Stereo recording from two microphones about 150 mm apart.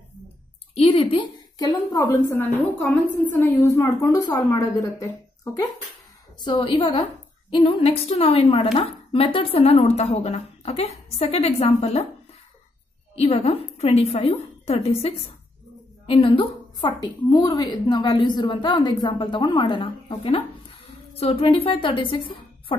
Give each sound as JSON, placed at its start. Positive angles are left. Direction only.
{"t": 0.7, "sound": "a woman's voice", "side_deg": 40}
{"t": 1.6, "sound": "a woman's voice", "side_deg": 25}
{"t": 2.8, "sound": "a woman's voice", "side_deg": 0}
{"t": 3.3, "sound": "a woman's voice", "side_deg": 15}
{"t": 6.4, "sound": "a woman's voice", "side_deg": 30}
{"t": 13.1, "sound": "a woman's voice", "side_deg": 40}